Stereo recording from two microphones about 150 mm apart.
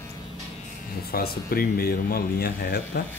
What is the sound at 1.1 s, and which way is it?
Speech, 90° left.